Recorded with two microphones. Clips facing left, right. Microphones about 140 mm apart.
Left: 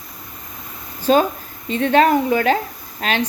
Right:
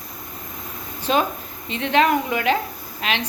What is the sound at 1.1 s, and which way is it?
A woman's voice, 40° left (ahead or behind).